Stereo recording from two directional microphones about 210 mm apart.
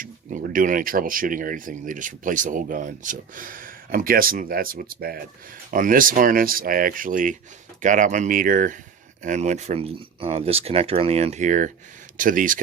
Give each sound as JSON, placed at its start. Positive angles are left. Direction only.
{"t": 0.0, "sound": "speech", "side_deg": -40}